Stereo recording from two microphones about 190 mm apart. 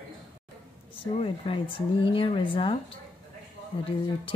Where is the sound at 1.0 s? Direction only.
30° left (ahead or behind).